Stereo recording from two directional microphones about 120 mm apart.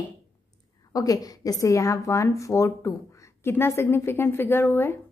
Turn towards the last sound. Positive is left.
turn(degrees=20)  # may be behind; listen again after turning